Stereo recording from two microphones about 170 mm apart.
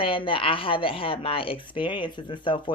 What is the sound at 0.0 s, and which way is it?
Speech, 30° left (ahead or behind).